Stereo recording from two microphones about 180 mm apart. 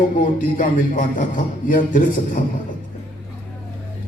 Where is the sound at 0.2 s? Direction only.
45° left (ahead or behind).